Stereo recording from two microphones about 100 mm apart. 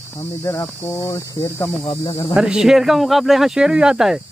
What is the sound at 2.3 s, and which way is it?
Speech, 5° right (ahead or behind).